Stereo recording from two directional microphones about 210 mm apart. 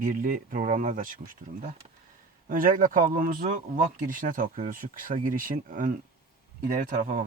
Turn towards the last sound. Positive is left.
turn(degrees=-40)  # may be behind; listen again after turning